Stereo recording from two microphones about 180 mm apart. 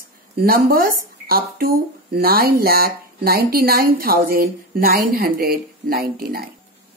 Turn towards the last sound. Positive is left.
turn(degrees=-55)  # may be behind; listen again after turning